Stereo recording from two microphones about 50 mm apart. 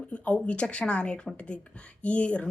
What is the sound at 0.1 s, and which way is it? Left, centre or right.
Speech, left.